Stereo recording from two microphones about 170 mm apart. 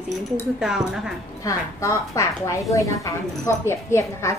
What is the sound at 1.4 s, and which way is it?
A woman's voice, 20° left (ahead or behind).